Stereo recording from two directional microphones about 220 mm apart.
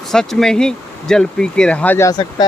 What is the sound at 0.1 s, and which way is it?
Speech, centre (ahead or behind).